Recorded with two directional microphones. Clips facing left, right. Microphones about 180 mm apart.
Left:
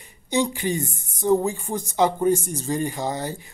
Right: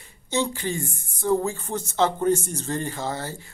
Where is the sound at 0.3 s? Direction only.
15° left (ahead or behind).